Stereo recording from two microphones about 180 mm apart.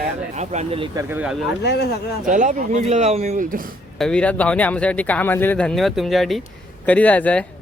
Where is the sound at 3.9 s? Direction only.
5° left (ahead or behind).